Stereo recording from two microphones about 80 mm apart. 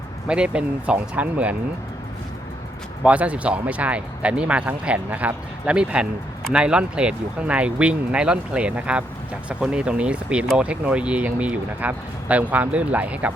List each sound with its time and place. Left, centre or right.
0.3 s speech: centre
3.0 s speech: centre